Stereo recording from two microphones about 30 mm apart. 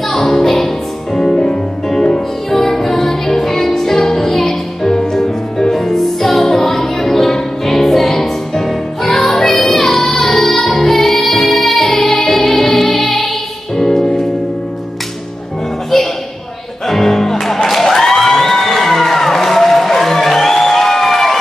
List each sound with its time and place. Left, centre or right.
0.1 s music: centre
13.9 s music: left
16.8 s music: centre
17.6 s a sound: centre